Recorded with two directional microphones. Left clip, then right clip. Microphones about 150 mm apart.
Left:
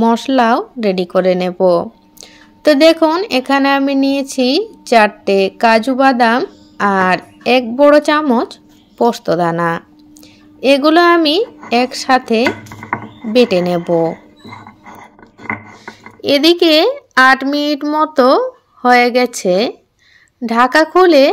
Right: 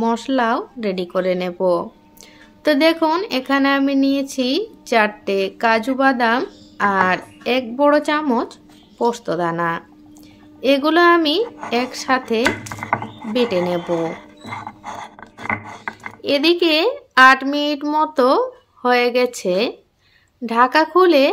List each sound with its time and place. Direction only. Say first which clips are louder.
0.0 s speech: left 6 dB; 35° left (ahead or behind)
14.9 s a sound: right 4 dB; 50° right (ahead or behind)
15.9 s a woman's voice: left 6 dB; 40° left (ahead or behind)